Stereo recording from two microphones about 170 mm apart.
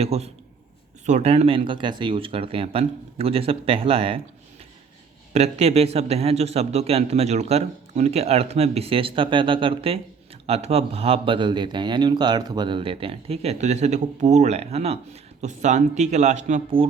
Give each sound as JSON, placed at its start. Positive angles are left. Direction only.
{"t": 0.0, "sound": "speech", "side_deg": -40}
{"t": 5.3, "sound": "speech", "side_deg": -40}
{"t": 16.8, "sound": "speech", "side_deg": -30}